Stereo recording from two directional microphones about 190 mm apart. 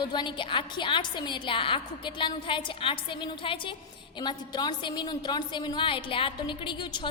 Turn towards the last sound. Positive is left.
turn(degrees=25)  # may be behind; listen again after turning